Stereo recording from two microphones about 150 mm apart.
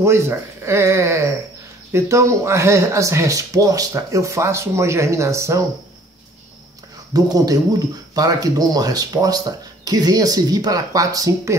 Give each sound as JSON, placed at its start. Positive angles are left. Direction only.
{"t": 0.0, "sound": "speech", "side_deg": -15}
{"t": 7.2, "sound": "speech", "side_deg": -25}